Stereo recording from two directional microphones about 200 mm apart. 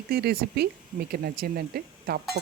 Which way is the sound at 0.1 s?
50° right (ahead or behind).